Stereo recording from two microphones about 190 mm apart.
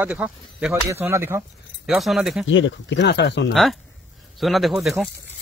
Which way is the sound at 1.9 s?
Centre (ahead or behind).